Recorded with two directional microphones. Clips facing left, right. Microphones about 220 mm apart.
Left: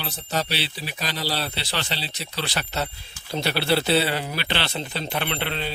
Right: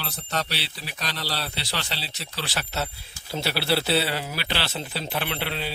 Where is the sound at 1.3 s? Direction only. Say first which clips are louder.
Left 4 dB; 25° left (ahead or behind).